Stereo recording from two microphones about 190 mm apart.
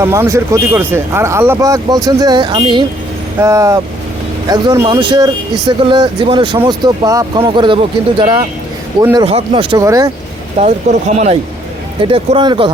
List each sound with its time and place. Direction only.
0.0 s speech: 15° right (ahead or behind)
9.2 s speech: 30° right (ahead or behind)
9.7 s speech: 20° right (ahead or behind)
10.9 s speech: 35° right (ahead or behind)
12.0 s speech: 30° right (ahead or behind)